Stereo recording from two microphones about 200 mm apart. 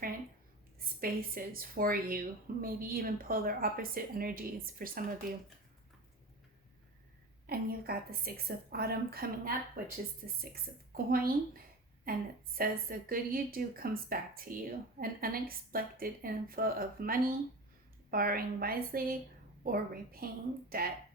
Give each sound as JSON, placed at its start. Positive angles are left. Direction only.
{"t": 0.9, "sound": "a woman's voice", "side_deg": -45}
{"t": 7.4, "sound": "a woman's voice", "side_deg": -50}